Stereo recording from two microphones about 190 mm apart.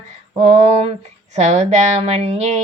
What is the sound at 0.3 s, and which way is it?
Speech, 35° right (ahead or behind).